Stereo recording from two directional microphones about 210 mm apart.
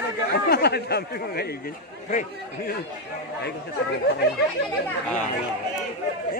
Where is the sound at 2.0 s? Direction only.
35° left (ahead or behind).